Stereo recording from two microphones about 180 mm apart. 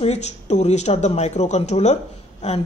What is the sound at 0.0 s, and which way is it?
A woman's voice, 35° left (ahead or behind).